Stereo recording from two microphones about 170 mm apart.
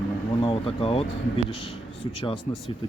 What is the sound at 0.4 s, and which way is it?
Speech, 35° left (ahead or behind).